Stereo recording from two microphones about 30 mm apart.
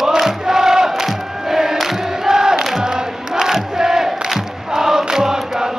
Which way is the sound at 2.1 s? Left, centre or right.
Centre.